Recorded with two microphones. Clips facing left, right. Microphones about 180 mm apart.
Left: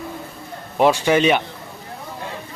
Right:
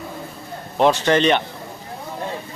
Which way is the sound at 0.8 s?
10° left (ahead or behind).